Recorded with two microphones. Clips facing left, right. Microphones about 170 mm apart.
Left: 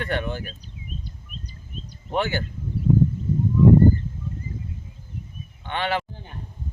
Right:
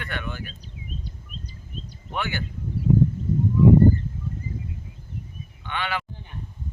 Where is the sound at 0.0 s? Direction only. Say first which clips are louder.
Left 6 dB; 40° left (ahead or behind).